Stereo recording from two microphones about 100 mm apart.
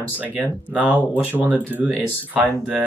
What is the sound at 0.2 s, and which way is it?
Speech, 15° right (ahead or behind).